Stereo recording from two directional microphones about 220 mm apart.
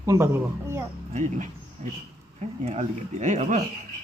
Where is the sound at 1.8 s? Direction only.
35° right (ahead or behind).